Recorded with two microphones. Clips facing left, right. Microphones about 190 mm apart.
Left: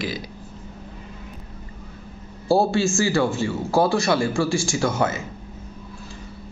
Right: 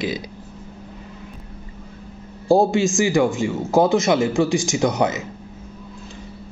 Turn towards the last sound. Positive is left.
turn(degrees=-20)  # may be behind; listen again after turning